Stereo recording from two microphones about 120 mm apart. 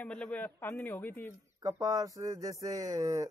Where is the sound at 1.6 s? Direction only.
30° right (ahead or behind).